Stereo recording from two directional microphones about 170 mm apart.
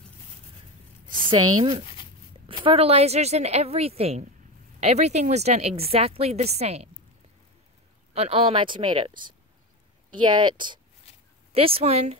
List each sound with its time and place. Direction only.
1.1 s a woman's voice: 30° right (ahead or behind)
8.1 s a woman's voice: 35° right (ahead or behind)